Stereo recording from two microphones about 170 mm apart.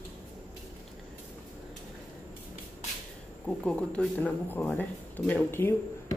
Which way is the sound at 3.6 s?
5° left (ahead or behind).